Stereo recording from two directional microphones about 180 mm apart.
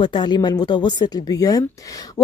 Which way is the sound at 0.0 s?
25° left (ahead or behind).